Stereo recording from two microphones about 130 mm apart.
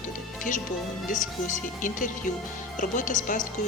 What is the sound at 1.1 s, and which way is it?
Speech, 80° left.